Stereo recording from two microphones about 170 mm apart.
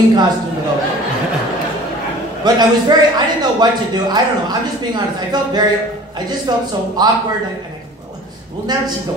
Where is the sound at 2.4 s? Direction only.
25° right (ahead or behind).